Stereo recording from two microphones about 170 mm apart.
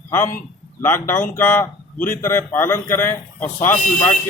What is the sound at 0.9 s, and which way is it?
A man's voice, 15° left (ahead or behind).